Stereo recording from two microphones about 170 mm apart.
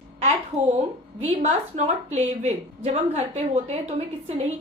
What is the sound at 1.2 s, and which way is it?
A woman's voice, 45° right (ahead or behind).